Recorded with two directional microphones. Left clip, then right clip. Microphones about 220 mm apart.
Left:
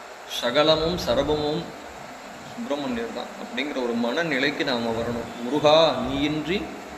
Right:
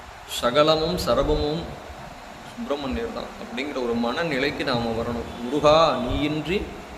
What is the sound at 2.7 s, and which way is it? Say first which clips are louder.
A man's voice: right 1 dB; 10° right (ahead or behind).